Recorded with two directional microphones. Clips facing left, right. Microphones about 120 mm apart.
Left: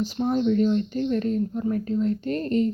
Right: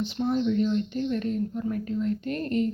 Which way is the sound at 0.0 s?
40° left (ahead or behind).